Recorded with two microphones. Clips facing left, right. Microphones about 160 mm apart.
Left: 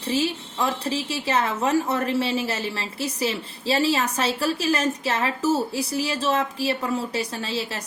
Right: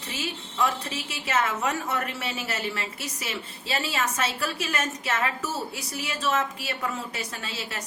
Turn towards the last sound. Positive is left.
turn(degrees=30)  # may be behind; listen again after turning